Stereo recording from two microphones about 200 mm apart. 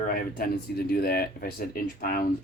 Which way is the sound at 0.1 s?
45° left (ahead or behind).